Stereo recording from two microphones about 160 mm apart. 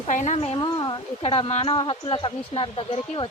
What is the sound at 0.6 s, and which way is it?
Speech, 25° left (ahead or behind).